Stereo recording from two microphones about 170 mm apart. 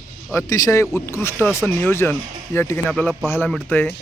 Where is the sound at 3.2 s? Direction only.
15° left (ahead or behind).